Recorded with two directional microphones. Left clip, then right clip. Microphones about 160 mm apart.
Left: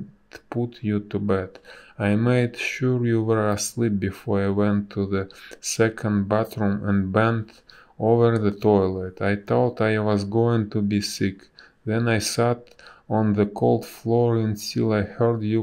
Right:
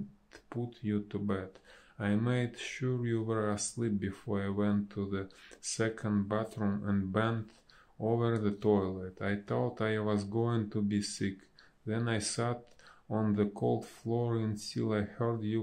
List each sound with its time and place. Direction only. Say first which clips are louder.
0.3 s speech: left 13 dB; 25° left (ahead or behind)